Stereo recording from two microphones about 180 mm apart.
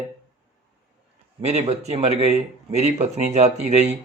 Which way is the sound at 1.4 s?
35° right (ahead or behind).